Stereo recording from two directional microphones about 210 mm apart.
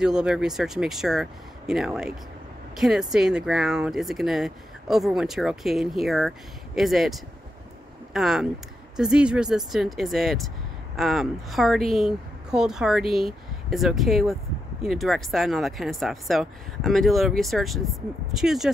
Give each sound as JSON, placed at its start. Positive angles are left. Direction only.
{"t": 0.0, "sound": "speech", "side_deg": -5}